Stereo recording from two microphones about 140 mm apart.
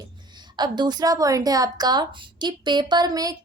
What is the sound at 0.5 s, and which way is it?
A woman's voice, 30° right (ahead or behind).